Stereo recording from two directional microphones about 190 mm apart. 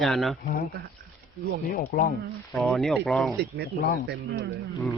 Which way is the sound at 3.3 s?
65° right (ahead or behind).